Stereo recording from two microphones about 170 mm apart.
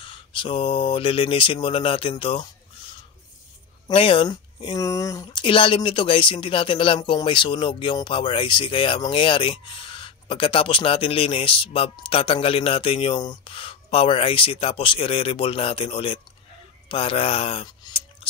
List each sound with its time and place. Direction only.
0.0 s speech: 30° left (ahead or behind)
3.8 s speech: 35° left (ahead or behind)